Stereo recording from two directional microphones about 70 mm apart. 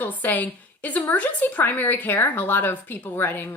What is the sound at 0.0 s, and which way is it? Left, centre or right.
A woman's voice, left.